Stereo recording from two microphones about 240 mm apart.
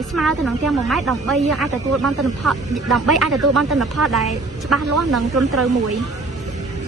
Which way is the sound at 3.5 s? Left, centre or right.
Right.